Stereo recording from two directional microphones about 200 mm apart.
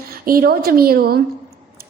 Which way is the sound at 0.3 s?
50° right (ahead or behind).